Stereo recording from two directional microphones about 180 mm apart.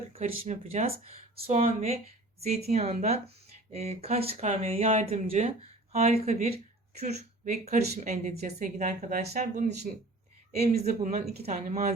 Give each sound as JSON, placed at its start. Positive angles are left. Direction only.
{"t": 0.4, "sound": "a woman's voice", "side_deg": -40}